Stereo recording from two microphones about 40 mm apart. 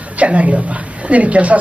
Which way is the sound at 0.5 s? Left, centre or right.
Right.